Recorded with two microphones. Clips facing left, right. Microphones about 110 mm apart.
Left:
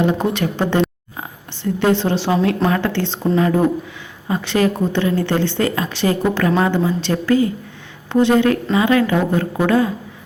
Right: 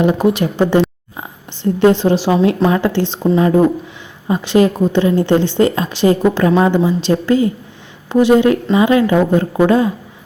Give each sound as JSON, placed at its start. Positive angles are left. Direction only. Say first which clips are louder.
{"t": 0.0, "sound": "a woman's voice", "louder": "right 4 dB", "side_deg": -15}